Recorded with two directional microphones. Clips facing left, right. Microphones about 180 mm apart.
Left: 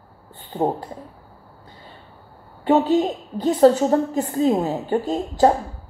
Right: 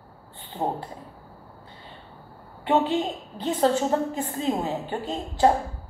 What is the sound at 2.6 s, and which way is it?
A woman's voice, 40° left (ahead or behind).